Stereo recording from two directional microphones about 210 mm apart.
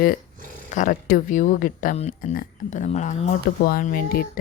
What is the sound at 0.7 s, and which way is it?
Speech, 40° left (ahead or behind).